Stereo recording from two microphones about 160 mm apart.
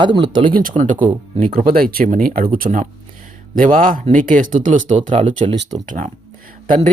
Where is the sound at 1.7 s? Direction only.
65° right (ahead or behind).